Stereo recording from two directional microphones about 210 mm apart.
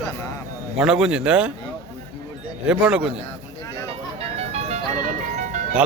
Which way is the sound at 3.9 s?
30° right (ahead or behind).